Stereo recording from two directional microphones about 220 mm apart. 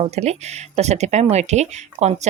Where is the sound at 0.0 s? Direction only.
30° right (ahead or behind).